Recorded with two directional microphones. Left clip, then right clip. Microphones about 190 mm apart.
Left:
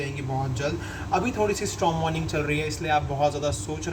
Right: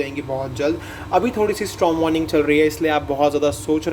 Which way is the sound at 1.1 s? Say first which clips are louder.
Right 6 dB; 50° right (ahead or behind).